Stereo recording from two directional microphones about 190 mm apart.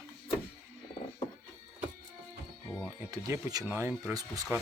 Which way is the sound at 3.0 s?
15° right (ahead or behind).